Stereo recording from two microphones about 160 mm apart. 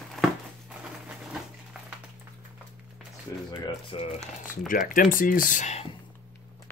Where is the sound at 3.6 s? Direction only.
35° left (ahead or behind).